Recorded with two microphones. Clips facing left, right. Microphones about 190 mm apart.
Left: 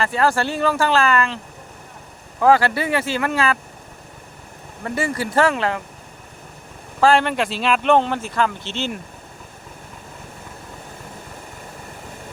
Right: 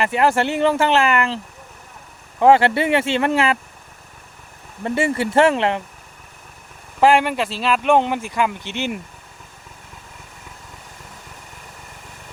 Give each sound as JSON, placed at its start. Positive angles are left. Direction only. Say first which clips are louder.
{"t": 0.0, "sound": "speech", "louder": "right 2 dB", "side_deg": -20}
{"t": 2.4, "sound": "speech", "louder": "right 2 dB", "side_deg": -25}
{"t": 4.8, "sound": "speech", "louder": "right 3 dB", "side_deg": -25}
{"t": 7.0, "sound": "speech", "louder": "right 1 dB", "side_deg": -15}